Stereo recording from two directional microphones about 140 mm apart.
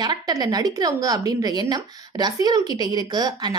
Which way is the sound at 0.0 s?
30° right (ahead or behind).